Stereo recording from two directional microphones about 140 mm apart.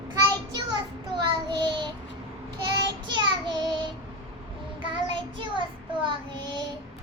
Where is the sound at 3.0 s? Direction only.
35° right (ahead or behind).